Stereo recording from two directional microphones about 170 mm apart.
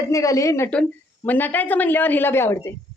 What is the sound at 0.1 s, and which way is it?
A man's voice, 20° left (ahead or behind).